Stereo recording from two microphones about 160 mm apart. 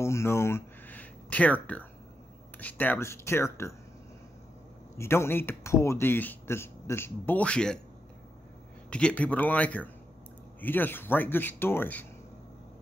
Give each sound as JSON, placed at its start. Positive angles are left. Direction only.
{"t": 0.0, "sound": "speech", "side_deg": 15}
{"t": 4.9, "sound": "speech", "side_deg": 15}
{"t": 8.9, "sound": "speech", "side_deg": 5}